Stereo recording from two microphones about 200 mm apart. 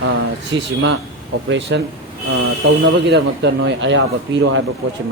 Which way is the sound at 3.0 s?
60° right (ahead or behind).